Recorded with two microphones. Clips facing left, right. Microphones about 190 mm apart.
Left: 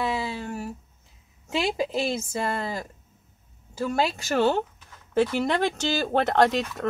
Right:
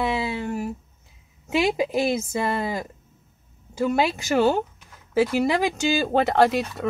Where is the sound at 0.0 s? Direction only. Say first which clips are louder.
Right 3 dB; 20° right (ahead or behind).